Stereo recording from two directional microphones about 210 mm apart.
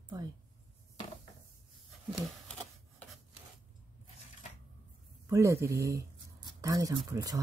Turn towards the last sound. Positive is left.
turn(degrees=-15)  # may be behind; listen again after turning